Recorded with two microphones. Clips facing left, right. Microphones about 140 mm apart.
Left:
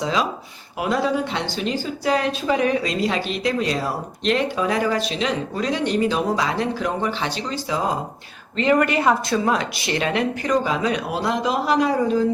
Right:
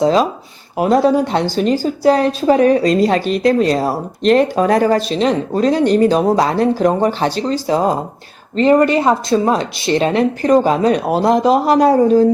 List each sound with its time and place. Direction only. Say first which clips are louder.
0.0 s speech: right 9 dB; 40° right (ahead or behind)